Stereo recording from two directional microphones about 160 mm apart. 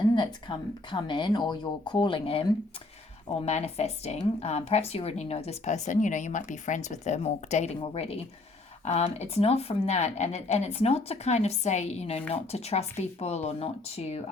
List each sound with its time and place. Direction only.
0.2 s speech: 30° left (ahead or behind)
3.4 s a woman's voice: 40° left (ahead or behind)